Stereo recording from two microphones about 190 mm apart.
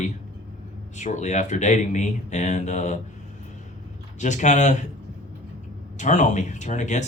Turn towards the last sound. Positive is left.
turn(degrees=40)  # may be behind; listen again after turning